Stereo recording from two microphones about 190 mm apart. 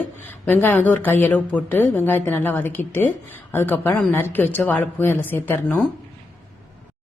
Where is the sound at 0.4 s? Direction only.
10° left (ahead or behind).